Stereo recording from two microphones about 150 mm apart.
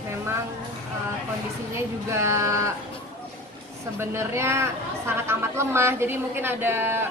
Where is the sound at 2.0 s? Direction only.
20° right (ahead or behind).